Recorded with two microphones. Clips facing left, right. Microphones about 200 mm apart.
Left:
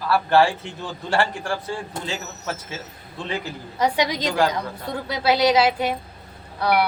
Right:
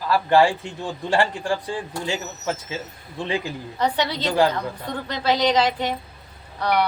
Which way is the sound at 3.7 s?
10° left (ahead or behind).